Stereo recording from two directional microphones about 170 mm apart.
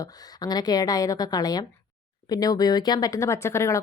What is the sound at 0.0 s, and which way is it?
Speech, 25° left (ahead or behind).